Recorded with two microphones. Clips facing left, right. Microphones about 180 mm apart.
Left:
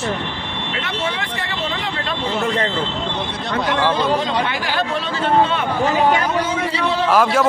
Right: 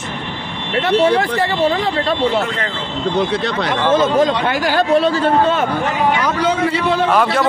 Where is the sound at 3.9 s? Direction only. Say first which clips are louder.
Right 5 dB; 45° right (ahead or behind).